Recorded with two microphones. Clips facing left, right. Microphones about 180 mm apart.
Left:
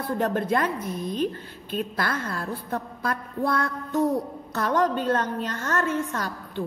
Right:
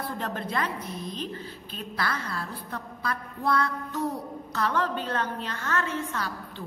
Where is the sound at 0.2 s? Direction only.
50° left (ahead or behind).